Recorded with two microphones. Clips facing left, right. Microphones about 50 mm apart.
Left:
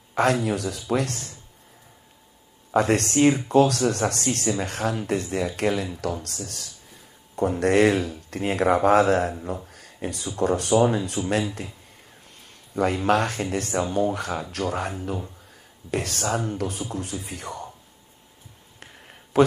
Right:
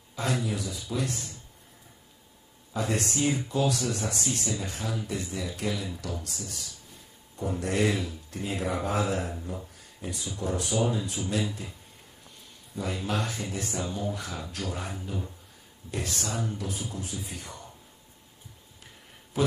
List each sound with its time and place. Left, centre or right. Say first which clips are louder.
0.1 s speech: left 9 dB; left
2.7 s speech: left 9 dB; left
12.7 s speech: left 10 dB; left
19.3 s a man's voice: left 9 dB; left